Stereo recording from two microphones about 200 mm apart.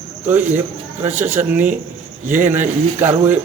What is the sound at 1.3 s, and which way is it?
A man's voice, 10° right (ahead or behind).